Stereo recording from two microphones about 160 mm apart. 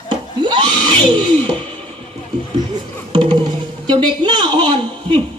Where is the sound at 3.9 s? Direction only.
30° right (ahead or behind).